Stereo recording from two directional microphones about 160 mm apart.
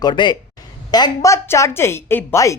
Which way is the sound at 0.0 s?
30° left (ahead or behind).